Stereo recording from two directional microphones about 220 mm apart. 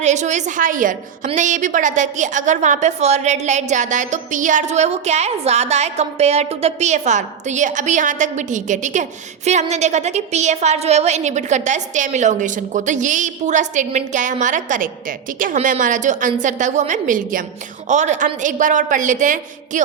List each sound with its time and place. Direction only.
0.0 s a woman's voice: 30° right (ahead or behind)